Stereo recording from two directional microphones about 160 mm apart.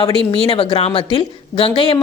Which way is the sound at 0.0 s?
35° left (ahead or behind).